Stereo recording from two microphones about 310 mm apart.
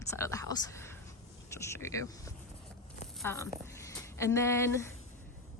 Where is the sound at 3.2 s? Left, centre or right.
Centre.